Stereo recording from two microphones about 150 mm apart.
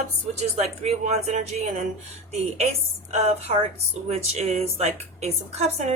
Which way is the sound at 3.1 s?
45° right (ahead or behind).